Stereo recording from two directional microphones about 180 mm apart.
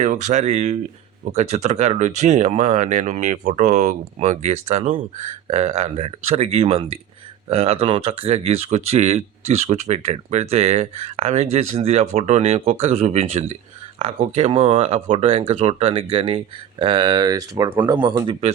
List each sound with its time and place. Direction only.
0.0 s speech: 40° right (ahead or behind); by 18.3 s 25° right (ahead or behind)